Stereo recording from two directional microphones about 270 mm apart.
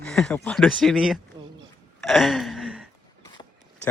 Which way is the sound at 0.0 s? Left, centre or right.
Centre.